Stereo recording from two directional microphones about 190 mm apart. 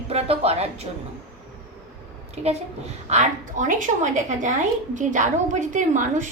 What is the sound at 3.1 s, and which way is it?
A woman's voice, 40° right (ahead or behind).